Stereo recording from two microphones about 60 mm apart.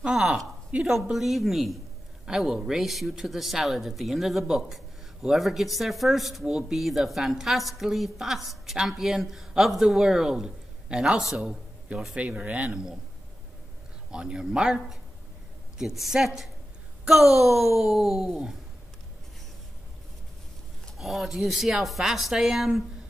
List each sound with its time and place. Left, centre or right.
0.0 s a man's voice: centre
1.1 s a man's voice: centre
12.2 s speech: right
14.1 s a man's voice: centre
21.0 s speech: centre